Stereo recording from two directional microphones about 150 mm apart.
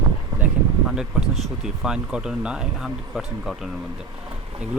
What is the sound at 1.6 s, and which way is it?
Speech, 5° right (ahead or behind).